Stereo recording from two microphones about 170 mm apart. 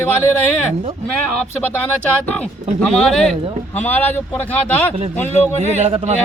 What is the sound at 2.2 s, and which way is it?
Speech, 10° left (ahead or behind).